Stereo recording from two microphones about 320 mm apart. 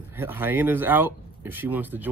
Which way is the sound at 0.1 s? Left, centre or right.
Centre.